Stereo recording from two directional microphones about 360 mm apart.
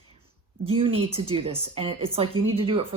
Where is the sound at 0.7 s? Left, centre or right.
Centre.